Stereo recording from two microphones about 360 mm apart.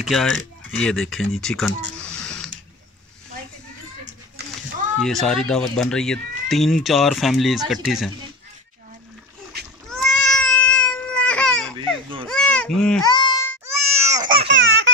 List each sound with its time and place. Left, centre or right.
0.0 s speech: centre
2.0 s a sound: centre
5.0 s speech: centre
9.8 s a sound: centre
13.7 s baby cry: centre
14.5 s baby laughter: right